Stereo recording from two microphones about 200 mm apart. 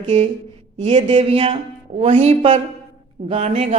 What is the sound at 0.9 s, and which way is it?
A man's voice, 25° right (ahead or behind).